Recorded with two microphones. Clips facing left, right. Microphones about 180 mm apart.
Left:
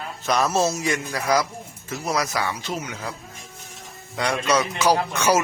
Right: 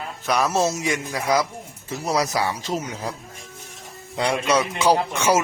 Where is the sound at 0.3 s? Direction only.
10° right (ahead or behind).